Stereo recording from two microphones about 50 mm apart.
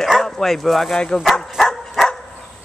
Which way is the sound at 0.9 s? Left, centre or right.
Centre.